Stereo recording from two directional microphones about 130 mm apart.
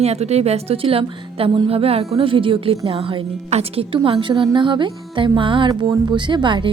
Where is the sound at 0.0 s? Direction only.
55° right (ahead or behind).